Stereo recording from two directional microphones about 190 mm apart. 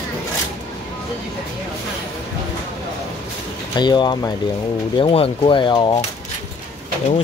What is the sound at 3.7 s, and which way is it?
Speech, 20° left (ahead or behind).